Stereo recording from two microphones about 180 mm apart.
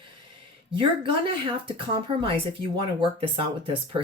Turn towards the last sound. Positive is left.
turn(degrees=-30)  # may be behind; listen again after turning